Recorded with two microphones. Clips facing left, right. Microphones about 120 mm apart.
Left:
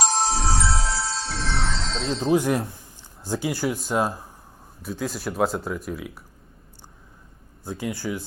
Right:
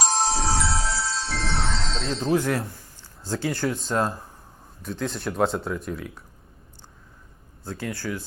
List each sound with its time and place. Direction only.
0.1 s music: centre (ahead or behind)
2.3 s speech: 15° left (ahead or behind)
7.6 s speech: 15° left (ahead or behind)